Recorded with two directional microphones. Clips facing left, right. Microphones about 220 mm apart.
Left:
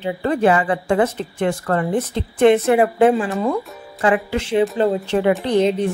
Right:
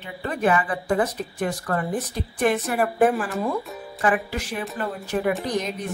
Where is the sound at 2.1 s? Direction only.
25° left (ahead or behind).